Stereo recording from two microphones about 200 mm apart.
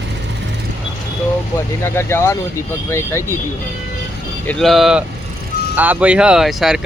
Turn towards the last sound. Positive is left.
turn(degrees=0)  # may be behind; listen again after turning